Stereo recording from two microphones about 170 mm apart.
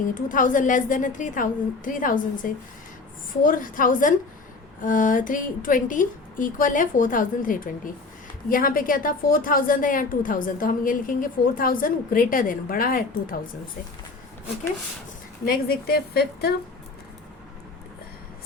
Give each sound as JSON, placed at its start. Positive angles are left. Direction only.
{"t": 0.0, "sound": "a woman's voice", "side_deg": 50}
{"t": 15.4, "sound": "a woman's voice", "side_deg": 60}